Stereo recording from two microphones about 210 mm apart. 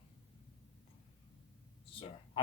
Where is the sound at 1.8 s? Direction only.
25° left (ahead or behind).